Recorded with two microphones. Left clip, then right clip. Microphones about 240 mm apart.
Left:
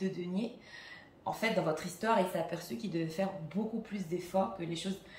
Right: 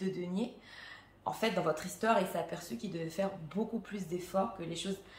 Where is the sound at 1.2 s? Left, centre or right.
Centre.